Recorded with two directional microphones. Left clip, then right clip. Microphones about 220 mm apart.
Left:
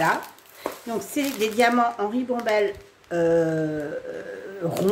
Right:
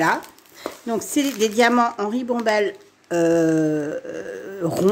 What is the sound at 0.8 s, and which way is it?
Speech, 45° right (ahead or behind).